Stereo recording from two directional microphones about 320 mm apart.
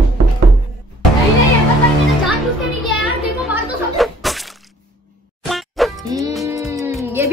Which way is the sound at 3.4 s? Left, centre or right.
Centre.